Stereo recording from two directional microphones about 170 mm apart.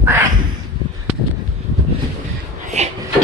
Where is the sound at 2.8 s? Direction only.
40° right (ahead or behind).